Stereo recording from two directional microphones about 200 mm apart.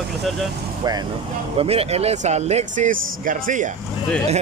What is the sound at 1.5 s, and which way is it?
Speech, 30° right (ahead or behind).